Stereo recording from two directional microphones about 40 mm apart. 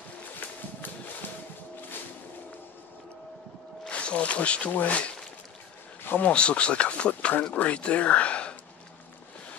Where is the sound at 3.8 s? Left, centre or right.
Left.